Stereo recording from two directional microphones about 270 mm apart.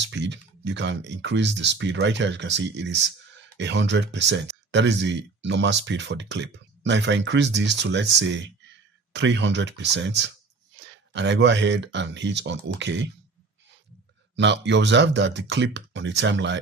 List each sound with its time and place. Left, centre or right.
0.0 s speech: right
14.3 s speech: right